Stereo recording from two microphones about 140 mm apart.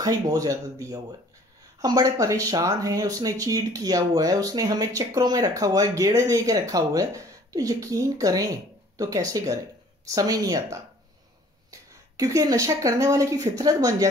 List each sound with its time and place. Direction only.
0.0 s speech: 25° right (ahead or behind)